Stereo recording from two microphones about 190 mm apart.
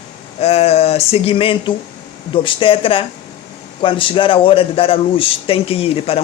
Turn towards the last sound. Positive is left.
turn(degrees=30)  # may be behind; listen again after turning